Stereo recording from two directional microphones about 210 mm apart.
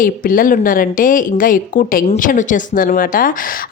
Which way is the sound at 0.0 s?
40° left (ahead or behind).